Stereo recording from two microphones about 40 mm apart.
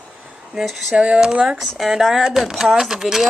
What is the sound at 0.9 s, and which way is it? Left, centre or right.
Speech, right.